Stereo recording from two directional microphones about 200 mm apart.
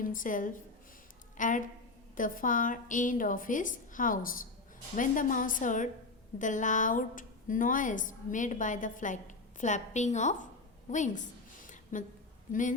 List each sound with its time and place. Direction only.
0.0 s a woman's voice: 40° left (ahead or behind)
11.6 s a sound: 40° left (ahead or behind)
12.5 s a woman's voice: 40° left (ahead or behind)